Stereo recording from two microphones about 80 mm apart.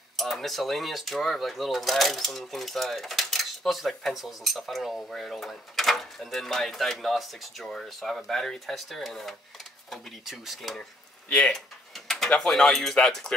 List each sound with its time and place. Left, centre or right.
0.2 s speech: centre
11.2 s speech: centre
12.1 s speech: centre